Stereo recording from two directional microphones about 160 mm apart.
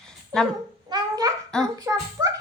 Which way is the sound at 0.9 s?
25° right (ahead or behind).